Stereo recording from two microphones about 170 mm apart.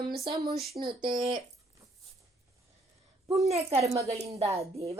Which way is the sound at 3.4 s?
40° right (ahead or behind).